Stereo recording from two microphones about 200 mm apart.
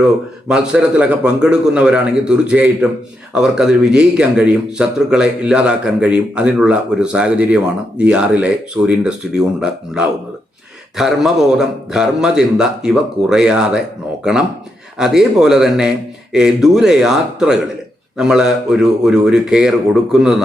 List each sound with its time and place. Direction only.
0.0 s speech: 5° right (ahead or behind)
14.9 s speech: 5° right (ahead or behind)